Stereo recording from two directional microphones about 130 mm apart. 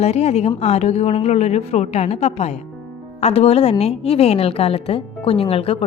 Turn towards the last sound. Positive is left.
turn(degrees=50)  # may be behind; listen again after turning